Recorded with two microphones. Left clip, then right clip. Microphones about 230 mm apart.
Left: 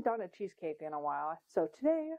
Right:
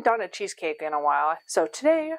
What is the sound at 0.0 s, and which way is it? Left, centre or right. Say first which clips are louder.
Speech: right 11 dB; centre.